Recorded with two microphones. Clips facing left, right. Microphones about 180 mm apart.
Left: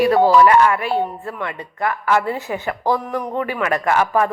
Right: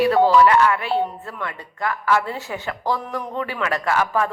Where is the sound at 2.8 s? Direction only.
50° left (ahead or behind).